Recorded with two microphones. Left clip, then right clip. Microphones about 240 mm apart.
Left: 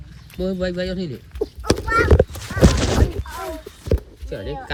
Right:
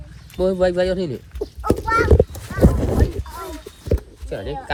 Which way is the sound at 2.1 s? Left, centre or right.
Right.